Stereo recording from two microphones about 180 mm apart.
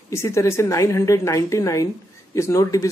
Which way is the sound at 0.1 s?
15° left (ahead or behind).